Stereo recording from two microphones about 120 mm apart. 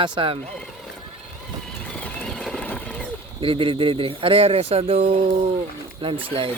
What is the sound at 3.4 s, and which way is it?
Speech, 45° right (ahead or behind).